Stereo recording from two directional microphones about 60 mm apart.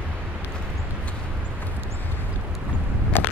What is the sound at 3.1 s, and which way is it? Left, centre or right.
Walk, left.